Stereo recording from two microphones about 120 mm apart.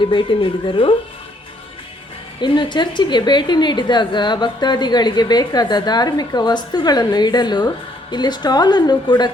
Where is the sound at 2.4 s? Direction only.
40° left (ahead or behind).